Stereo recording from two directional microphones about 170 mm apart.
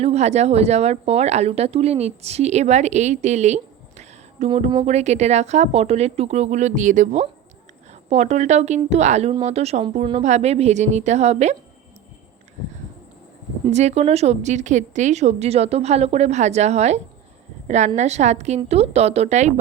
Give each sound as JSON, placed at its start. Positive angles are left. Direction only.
{"t": 0.0, "sound": "speech", "side_deg": -40}
{"t": 13.7, "sound": "speech", "side_deg": -40}